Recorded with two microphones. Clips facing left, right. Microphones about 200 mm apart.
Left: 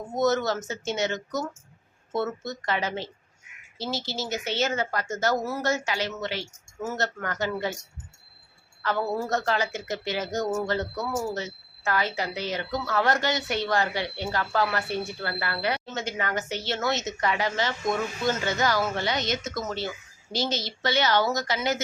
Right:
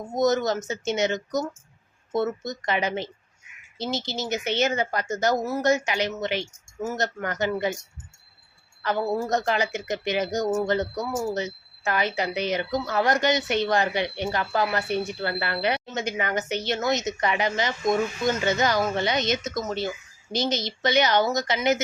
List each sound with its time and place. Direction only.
0.1 s a woman's voice: 15° right (ahead or behind)
8.8 s a woman's voice: 15° right (ahead or behind)